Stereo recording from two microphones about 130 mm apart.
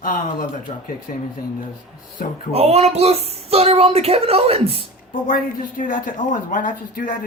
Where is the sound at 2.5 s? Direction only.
50° right (ahead or behind).